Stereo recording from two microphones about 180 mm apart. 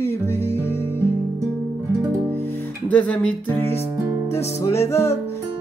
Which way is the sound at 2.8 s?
5° left (ahead or behind).